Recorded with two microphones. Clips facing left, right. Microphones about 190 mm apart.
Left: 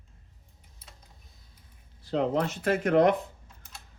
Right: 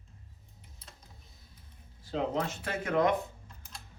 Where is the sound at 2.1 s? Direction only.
65° left (ahead or behind).